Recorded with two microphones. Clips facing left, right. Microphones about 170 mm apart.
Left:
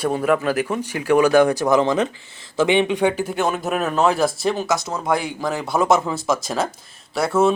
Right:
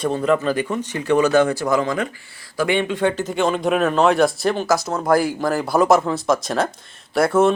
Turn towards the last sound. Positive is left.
turn(degrees=0)  # may be behind; listen again after turning